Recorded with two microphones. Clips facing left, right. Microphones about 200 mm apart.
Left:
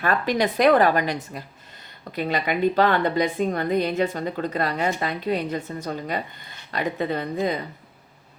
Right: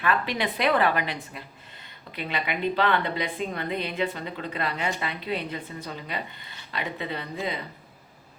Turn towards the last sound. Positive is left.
turn(degrees=45)  # may be behind; listen again after turning